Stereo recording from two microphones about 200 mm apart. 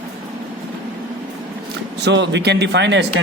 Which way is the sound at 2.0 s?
60° right (ahead or behind).